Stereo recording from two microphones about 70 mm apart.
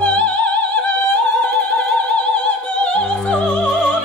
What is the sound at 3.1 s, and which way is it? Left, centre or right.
Music, centre.